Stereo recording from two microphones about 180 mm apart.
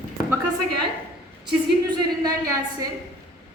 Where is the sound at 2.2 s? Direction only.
20° right (ahead or behind).